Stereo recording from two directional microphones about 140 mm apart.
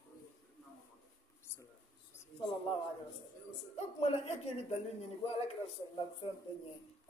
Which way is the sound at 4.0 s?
50° left (ahead or behind).